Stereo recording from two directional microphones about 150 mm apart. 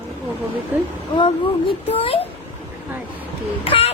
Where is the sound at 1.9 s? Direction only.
40° left (ahead or behind).